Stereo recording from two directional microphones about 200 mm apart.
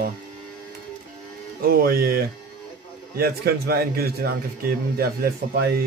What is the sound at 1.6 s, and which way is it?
A man's voice, 45° right (ahead or behind).